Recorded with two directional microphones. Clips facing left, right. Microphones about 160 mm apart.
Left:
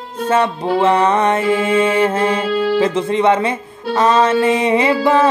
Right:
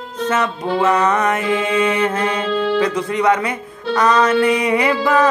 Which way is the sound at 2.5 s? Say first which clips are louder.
Left 2 dB; 10° left (ahead or behind).